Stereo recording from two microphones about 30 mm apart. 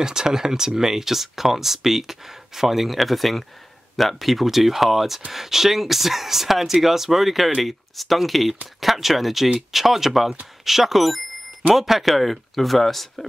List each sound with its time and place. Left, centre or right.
0.0 s speech: right; by 13.3 s centre